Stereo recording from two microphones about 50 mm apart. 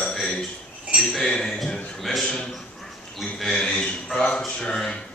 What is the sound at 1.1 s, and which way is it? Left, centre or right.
A man's voice, centre.